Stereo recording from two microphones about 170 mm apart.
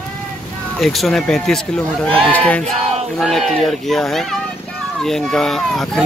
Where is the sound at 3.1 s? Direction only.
Centre (ahead or behind).